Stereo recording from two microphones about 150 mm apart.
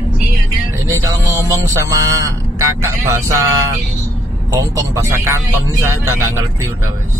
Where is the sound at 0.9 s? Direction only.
20° right (ahead or behind).